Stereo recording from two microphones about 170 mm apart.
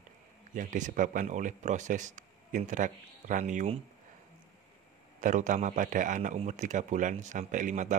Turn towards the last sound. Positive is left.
turn(degrees=-45)  # may be behind; listen again after turning